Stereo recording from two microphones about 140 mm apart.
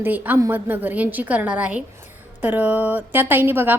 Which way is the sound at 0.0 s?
15° right (ahead or behind).